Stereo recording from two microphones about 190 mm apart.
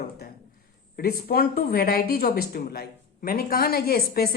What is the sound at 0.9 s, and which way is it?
A woman's voice, 55° left (ahead or behind).